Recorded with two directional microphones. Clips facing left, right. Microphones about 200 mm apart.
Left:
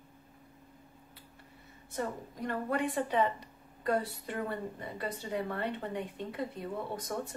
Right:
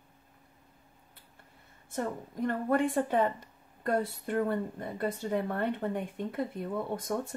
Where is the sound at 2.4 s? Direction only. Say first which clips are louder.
Right 5 dB; 50° right (ahead or behind).